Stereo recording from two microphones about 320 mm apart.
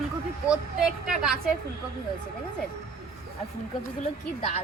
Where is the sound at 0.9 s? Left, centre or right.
Centre.